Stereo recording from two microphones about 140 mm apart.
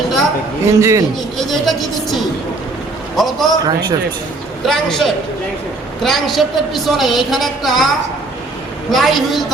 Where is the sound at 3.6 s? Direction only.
30° right (ahead or behind).